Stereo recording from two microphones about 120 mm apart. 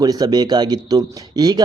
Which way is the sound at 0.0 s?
35° right (ahead or behind).